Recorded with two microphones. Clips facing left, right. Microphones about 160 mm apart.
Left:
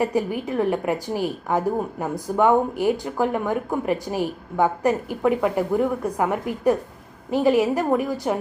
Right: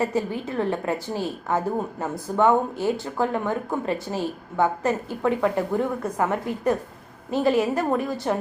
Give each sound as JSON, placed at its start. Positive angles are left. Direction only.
{"t": 0.0, "sound": "a woman's voice", "side_deg": 15}